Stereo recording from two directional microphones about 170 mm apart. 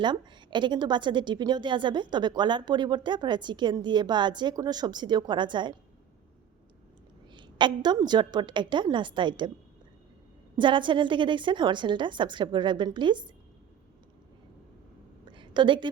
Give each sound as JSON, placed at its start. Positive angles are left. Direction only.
{"t": 0.0, "sound": "a woman's voice", "side_deg": -25}
{"t": 7.3, "sound": "a woman's voice", "side_deg": -25}
{"t": 10.6, "sound": "a woman's voice", "side_deg": -30}
{"t": 15.3, "sound": "a sound", "side_deg": -30}